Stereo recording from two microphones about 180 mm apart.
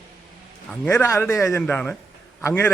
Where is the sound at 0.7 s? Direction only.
10° left (ahead or behind).